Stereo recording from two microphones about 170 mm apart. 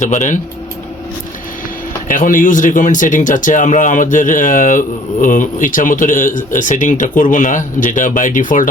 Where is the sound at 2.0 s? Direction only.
50° left (ahead or behind).